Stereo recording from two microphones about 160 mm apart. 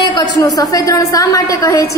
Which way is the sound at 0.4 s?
20° left (ahead or behind).